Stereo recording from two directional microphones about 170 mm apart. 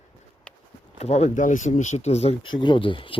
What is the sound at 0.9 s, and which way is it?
Speech, 40° left (ahead or behind).